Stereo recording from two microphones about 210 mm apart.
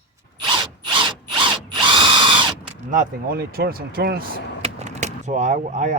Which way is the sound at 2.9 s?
45° right (ahead or behind).